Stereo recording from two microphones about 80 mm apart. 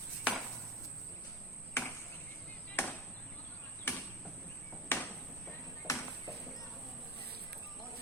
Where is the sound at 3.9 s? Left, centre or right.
Left.